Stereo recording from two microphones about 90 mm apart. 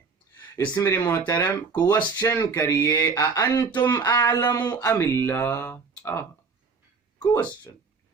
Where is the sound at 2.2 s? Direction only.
35° left (ahead or behind).